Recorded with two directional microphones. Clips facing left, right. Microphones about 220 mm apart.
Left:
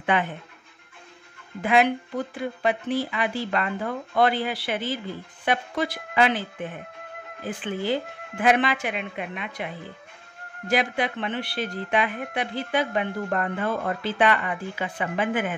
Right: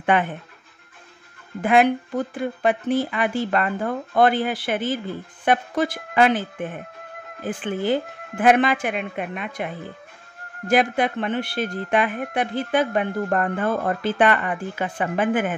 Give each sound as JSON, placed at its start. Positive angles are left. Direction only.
{"t": 0.0, "sound": "speech", "side_deg": -50}
{"t": 1.6, "sound": "speech", "side_deg": -50}